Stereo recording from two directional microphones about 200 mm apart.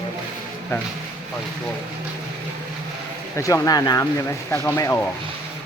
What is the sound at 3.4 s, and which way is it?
Speech, 15° left (ahead or behind).